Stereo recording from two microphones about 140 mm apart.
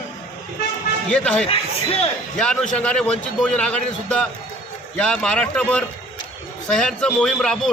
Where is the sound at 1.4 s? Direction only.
45° left (ahead or behind).